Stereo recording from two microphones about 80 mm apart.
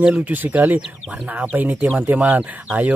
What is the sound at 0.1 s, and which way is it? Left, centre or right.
Speech, right.